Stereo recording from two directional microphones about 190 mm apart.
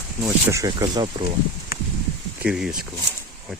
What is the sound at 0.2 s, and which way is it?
Speech, 15° right (ahead or behind).